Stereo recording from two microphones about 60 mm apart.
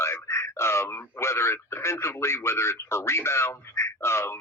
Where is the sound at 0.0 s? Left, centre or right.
Left.